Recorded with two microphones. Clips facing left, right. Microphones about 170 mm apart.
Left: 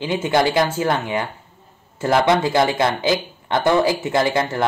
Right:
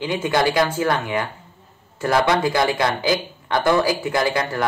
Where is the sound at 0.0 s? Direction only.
25° left (ahead or behind).